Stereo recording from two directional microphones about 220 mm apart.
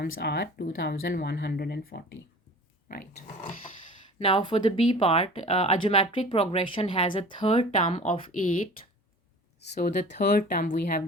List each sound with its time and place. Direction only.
0.1 s speech: 50° left (ahead or behind)
4.2 s speech: 25° left (ahead or behind)
9.7 s speech: 35° left (ahead or behind)